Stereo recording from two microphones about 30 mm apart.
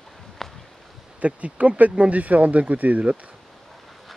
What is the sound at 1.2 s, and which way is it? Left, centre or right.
Speech, right.